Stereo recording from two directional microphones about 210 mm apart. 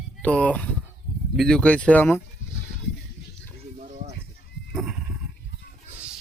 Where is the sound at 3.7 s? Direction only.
35° right (ahead or behind).